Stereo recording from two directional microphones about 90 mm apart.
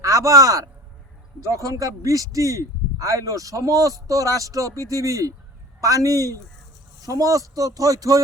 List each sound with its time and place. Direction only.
0.0 s a man's voice: 35° right (ahead or behind)